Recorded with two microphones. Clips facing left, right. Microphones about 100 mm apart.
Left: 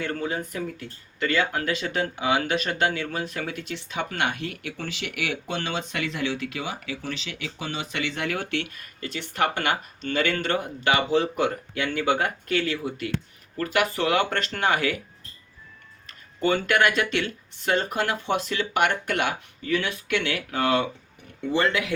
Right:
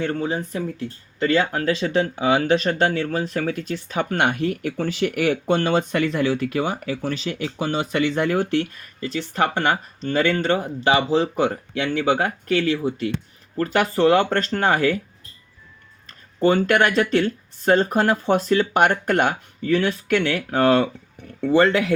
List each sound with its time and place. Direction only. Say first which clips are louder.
0.0 s speech: right 5 dB; 30° right (ahead or behind)
12.0 s speech: right 3 dB; 40° right (ahead or behind)
16.0 s speech: right 6 dB; 35° right (ahead or behind)